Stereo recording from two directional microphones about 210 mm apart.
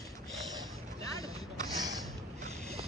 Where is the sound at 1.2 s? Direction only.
15° left (ahead or behind).